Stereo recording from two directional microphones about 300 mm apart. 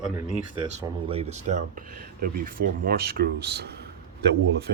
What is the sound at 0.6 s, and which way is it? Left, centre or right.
Speech, centre.